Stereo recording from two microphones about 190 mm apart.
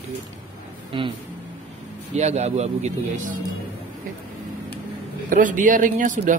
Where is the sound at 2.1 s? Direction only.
35° right (ahead or behind).